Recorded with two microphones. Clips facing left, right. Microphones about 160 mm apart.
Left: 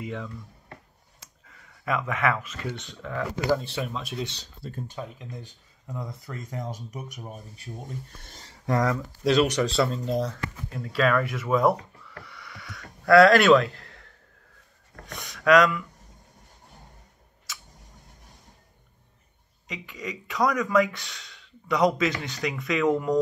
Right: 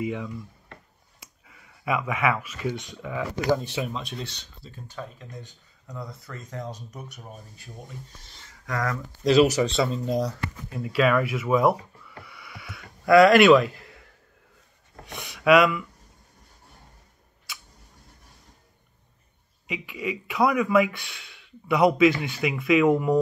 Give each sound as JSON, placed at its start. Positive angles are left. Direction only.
{"t": 0.0, "sound": "speech", "side_deg": -10}
{"t": 1.4, "sound": "speech", "side_deg": -5}
{"t": 5.0, "sound": "speech", "side_deg": 15}
{"t": 8.4, "sound": "a sound", "side_deg": 30}
{"t": 9.2, "sound": "speech", "side_deg": -5}
{"t": 19.7, "sound": "speech", "side_deg": -10}